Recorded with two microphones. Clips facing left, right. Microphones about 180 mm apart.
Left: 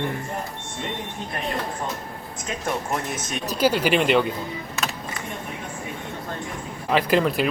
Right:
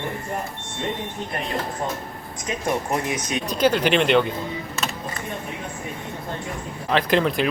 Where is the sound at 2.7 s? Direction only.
10° right (ahead or behind).